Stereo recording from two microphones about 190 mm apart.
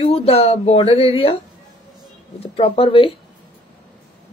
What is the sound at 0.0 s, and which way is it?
Speech, 30° left (ahead or behind).